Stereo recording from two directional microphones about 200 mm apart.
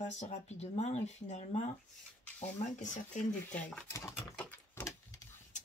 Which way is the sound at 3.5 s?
5° left (ahead or behind).